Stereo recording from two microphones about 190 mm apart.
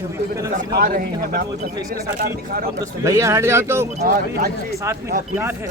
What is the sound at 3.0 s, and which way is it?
Speech, 15° right (ahead or behind).